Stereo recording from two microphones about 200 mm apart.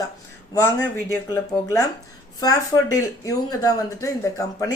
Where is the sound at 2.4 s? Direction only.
15° left (ahead or behind).